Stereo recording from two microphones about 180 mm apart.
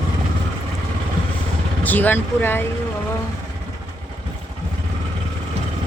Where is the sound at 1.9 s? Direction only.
10° left (ahead or behind).